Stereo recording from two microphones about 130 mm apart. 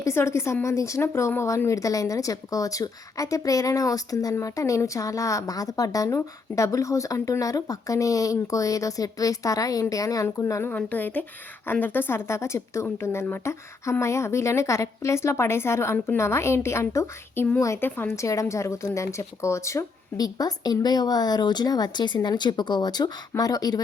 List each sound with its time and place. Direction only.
0.0 s speech: 20° left (ahead or behind)